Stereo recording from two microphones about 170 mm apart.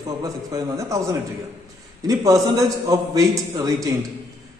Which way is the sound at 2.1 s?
20° right (ahead or behind).